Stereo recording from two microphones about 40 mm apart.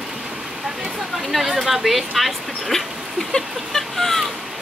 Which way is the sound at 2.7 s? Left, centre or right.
Centre.